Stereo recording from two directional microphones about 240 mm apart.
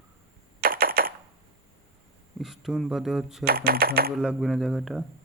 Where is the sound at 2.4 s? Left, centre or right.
Centre.